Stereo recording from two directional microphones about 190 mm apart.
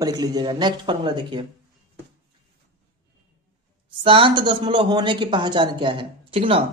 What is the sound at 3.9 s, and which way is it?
A man's voice, 25° right (ahead or behind).